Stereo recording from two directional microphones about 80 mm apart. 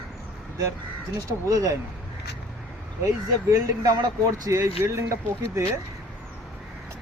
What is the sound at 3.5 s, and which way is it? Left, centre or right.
Speech, right.